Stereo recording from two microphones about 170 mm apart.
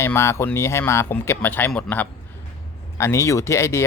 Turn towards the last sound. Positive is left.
turn(degrees=15)  # may be behind; listen again after turning